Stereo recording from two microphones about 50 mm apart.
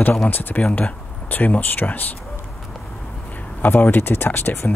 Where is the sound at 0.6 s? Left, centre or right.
Left.